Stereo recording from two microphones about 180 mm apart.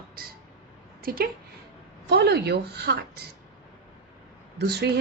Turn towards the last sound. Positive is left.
turn(degrees=-65)  # may be behind; listen again after turning